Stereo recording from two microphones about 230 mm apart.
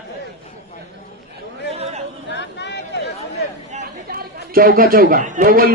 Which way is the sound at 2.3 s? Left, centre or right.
Left.